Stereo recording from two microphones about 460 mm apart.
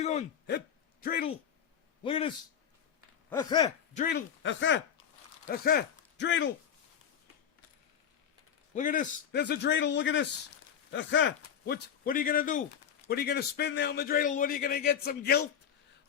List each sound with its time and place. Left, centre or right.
0.0 s a sound: centre
1.0 s a man's voice: centre
8.7 s a man's voice: centre